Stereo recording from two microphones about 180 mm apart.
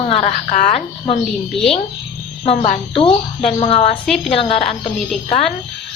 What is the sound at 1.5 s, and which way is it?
Speech, centre (ahead or behind).